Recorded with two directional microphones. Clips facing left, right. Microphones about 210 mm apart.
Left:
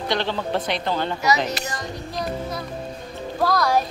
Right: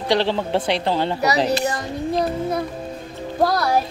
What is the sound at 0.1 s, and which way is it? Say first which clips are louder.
Speech: right 5 dB; 30° right (ahead or behind).